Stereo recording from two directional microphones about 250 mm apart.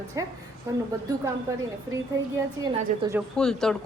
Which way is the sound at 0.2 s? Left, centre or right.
Centre.